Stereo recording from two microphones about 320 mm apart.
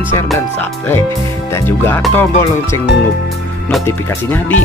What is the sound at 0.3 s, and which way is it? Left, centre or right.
Speech, centre.